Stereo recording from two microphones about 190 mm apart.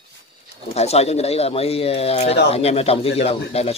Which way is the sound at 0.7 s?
35° left (ahead or behind).